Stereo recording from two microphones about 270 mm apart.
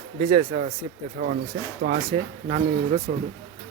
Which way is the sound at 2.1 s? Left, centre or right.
Centre.